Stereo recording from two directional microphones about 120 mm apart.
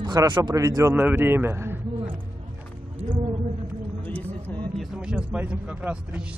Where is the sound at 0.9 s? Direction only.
15° right (ahead or behind).